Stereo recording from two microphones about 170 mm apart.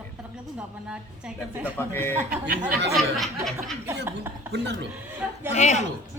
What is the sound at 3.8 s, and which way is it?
Speech, 15° right (ahead or behind).